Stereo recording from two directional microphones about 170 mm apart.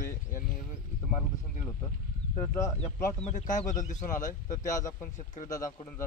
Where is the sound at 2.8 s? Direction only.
45° left (ahead or behind).